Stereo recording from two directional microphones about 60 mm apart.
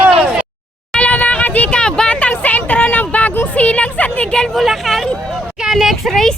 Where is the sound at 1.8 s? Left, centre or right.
Centre.